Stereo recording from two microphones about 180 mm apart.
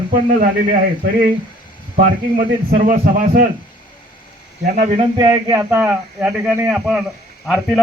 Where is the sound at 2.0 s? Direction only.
45° right (ahead or behind).